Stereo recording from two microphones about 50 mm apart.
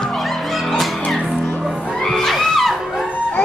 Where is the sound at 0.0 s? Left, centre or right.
Centre.